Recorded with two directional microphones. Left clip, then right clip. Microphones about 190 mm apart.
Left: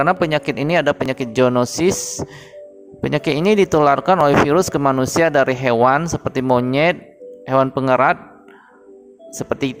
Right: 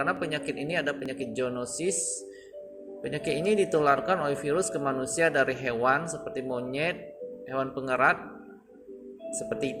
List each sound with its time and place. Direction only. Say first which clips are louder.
0.0 s speech: left 13 dB; 45° left (ahead or behind)
9.3 s speech: left 9 dB; 45° left (ahead or behind)